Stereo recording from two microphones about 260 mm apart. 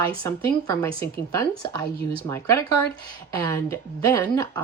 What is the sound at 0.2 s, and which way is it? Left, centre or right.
Speech, centre.